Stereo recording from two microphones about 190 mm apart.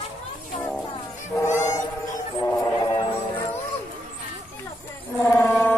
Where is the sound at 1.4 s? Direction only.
15° left (ahead or behind).